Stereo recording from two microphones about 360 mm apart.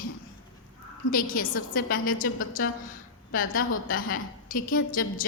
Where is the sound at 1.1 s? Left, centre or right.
Left.